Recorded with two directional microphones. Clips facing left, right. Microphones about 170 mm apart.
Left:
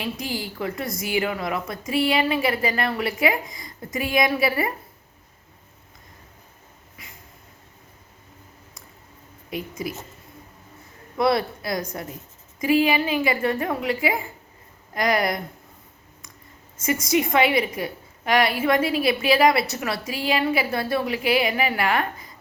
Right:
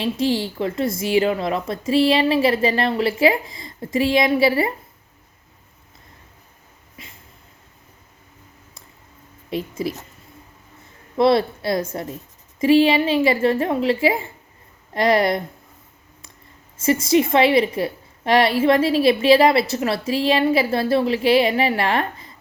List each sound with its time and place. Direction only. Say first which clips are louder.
0.0 s a woman's voice: right 8 dB; 30° right (ahead or behind)
7.0 s a sound: right 4 dB; 25° right (ahead or behind)
9.5 s a woman's voice: right 5 dB; 30° right (ahead or behind)
11.2 s a woman's voice: right 5 dB; 25° right (ahead or behind)
16.7 s a woman's voice: right 5 dB; 30° right (ahead or behind)